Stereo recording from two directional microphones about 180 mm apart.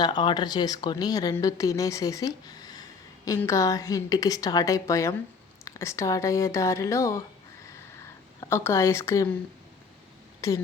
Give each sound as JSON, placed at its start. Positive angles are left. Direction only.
{"t": 0.0, "sound": "speech", "side_deg": 25}
{"t": 8.4, "sound": "speech", "side_deg": 15}